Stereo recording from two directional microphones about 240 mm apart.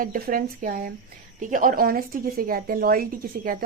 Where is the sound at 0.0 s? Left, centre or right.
Right.